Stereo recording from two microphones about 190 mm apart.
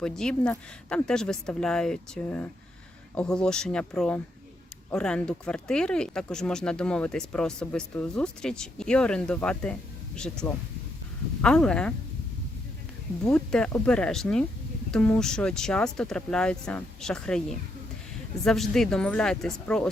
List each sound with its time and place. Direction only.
0.0 s speech: 5° left (ahead or behind)
13.2 s speech: 5° left (ahead or behind)
18.4 s speech: centre (ahead or behind)